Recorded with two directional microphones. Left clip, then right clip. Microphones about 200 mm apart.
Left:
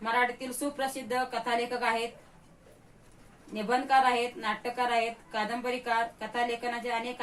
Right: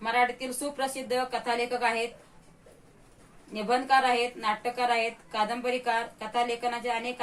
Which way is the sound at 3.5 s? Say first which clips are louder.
Right 1 dB; 15° right (ahead or behind).